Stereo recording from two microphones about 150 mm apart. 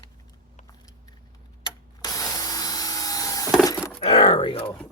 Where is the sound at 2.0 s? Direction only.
25° left (ahead or behind).